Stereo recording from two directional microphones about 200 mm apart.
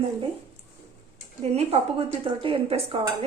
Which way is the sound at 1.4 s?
30° right (ahead or behind).